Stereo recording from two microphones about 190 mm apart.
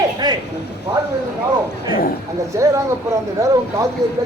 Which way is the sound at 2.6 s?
15° right (ahead or behind).